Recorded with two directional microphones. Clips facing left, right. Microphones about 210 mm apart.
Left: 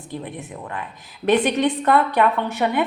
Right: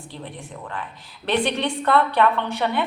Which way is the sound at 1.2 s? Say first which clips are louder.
Left 5 dB; 10° left (ahead or behind).